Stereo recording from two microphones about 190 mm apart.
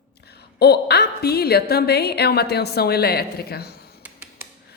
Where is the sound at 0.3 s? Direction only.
60° left (ahead or behind).